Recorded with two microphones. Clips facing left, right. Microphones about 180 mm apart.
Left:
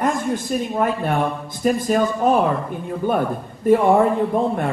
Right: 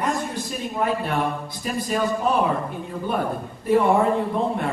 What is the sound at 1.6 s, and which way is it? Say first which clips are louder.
Speech: left 6 dB; 45° left (ahead or behind).